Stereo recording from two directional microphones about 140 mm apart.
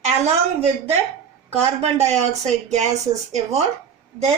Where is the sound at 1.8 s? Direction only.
50° right (ahead or behind).